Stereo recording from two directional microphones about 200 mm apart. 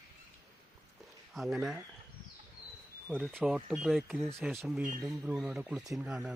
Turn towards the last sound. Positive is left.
turn(degrees=0)  # may be behind; listen again after turning